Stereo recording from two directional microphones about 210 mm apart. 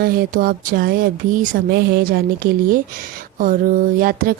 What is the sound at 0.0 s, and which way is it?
Speech, 45° right (ahead or behind).